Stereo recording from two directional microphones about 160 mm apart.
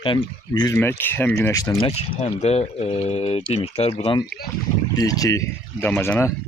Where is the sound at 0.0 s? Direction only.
30° left (ahead or behind).